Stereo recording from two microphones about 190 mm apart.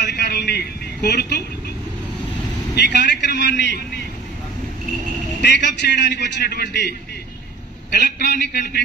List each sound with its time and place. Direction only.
0.0 s vehicle: 60° left (ahead or behind)
2.7 s a man's voice: 65° left (ahead or behind)
5.4 s a man's voice: 65° left (ahead or behind)
8.2 s a man's voice: 55° left (ahead or behind)